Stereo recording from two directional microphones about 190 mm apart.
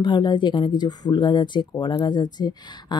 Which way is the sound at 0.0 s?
25° left (ahead or behind).